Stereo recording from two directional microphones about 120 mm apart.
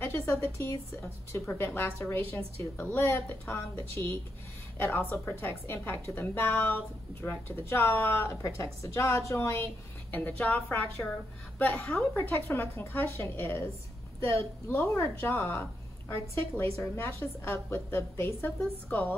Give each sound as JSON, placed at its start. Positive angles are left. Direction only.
{"t": 0.0, "sound": "speech", "side_deg": 25}
{"t": 1.4, "sound": "a woman's voice", "side_deg": 10}